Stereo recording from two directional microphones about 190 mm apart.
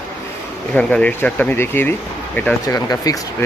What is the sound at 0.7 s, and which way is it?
Speech, 5° left (ahead or behind).